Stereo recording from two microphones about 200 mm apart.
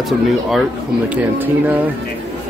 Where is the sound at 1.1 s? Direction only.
10° right (ahead or behind).